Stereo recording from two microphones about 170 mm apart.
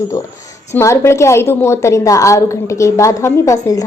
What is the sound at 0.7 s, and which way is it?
A woman's voice, 15° left (ahead or behind).